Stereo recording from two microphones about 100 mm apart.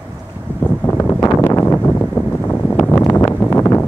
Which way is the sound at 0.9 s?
25° left (ahead or behind).